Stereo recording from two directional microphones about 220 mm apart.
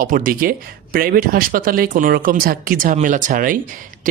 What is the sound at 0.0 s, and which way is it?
Speech, 40° right (ahead or behind).